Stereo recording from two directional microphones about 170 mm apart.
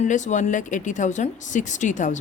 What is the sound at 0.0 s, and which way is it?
A woman's voice, 45° left (ahead or behind).